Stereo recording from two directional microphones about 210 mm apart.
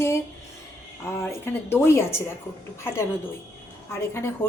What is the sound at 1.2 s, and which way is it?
A woman's voice, 10° left (ahead or behind).